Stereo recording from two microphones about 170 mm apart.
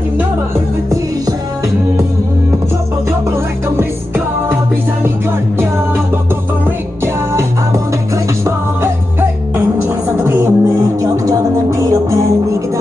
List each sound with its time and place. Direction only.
8.5 s music: 15° right (ahead or behind)